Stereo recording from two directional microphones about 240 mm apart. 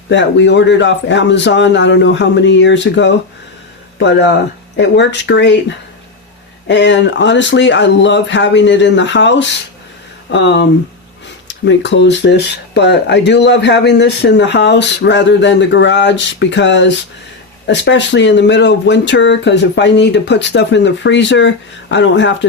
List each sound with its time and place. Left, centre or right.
0.1 s speech: left
6.7 s speech: left